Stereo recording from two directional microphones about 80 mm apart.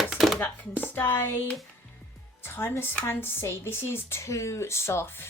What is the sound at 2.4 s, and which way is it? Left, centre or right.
Speech, left.